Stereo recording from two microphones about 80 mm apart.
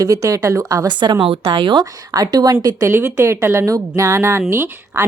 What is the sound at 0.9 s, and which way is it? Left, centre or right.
A woman's voice, right.